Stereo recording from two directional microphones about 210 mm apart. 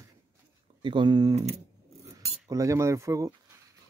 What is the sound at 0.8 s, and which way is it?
Speech, 20° right (ahead or behind).